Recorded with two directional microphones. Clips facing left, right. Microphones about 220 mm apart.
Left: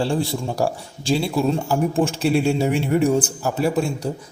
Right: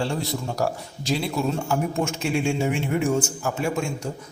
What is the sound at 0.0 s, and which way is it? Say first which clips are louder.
A man's voice: left 5 dB; 30° left (ahead or behind).